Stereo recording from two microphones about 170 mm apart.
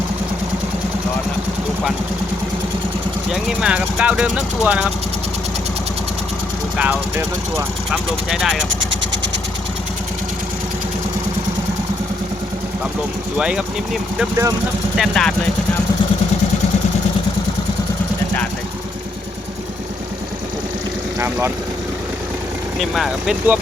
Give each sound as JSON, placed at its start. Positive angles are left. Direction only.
{"t": 3.3, "sound": "speech", "side_deg": -5}
{"t": 6.7, "sound": "speech", "side_deg": -10}
{"t": 8.9, "sound": "vehicle", "side_deg": -90}
{"t": 13.3, "sound": "speech", "side_deg": -5}
{"t": 21.2, "sound": "vehicle", "side_deg": -15}
{"t": 22.8, "sound": "speech", "side_deg": 0}